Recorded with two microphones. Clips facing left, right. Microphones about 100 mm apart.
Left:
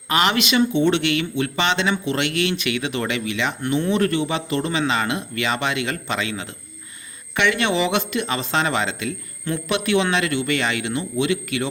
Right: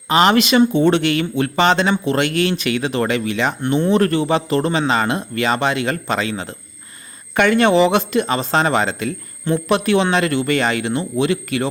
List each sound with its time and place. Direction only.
0.1 s speech: 35° right (ahead or behind)